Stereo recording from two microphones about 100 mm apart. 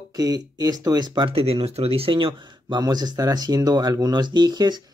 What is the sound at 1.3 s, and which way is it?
Speech, 70° right (ahead or behind).